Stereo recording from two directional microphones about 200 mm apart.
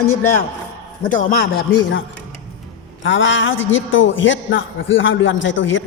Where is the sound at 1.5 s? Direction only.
60° left (ahead or behind).